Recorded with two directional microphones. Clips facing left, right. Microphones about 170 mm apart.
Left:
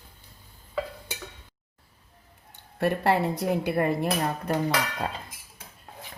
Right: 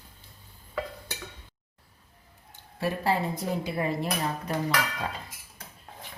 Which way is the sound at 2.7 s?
65° left (ahead or behind).